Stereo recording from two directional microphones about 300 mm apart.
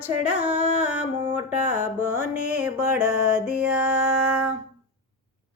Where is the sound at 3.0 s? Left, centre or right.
Right.